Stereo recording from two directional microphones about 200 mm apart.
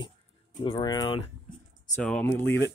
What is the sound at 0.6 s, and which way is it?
Speech, 25° left (ahead or behind).